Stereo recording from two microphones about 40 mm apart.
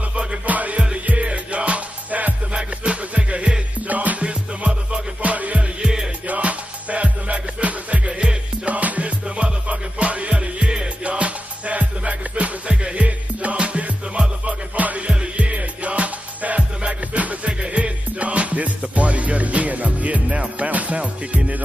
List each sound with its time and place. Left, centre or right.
0.1 s music: right
0.5 s music: right
3.8 s music: right
4.2 s music: right
5.8 s music: centre
6.2 s music: right